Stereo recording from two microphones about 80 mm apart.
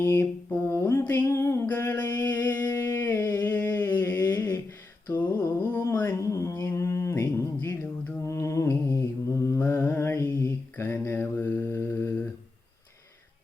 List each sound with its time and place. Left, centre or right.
0.0 s music: left
1.6 s a sound: left
5.0 s humming: left
6.1 s a sound: left
6.7 s mantra: left
9.6 s mantra: left